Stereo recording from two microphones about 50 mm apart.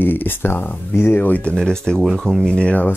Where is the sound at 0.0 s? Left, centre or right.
Left.